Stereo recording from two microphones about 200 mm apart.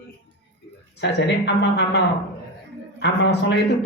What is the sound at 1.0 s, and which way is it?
Speech, 60° left (ahead or behind).